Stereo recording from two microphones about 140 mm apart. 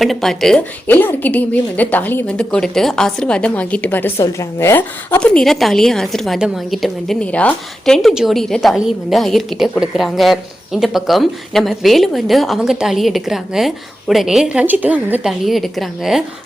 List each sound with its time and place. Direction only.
0.0 s a woman's voice: centre (ahead or behind)
0.9 s a woman's voice: 15° left (ahead or behind)
5.2 s a woman's voice: 5° left (ahead or behind)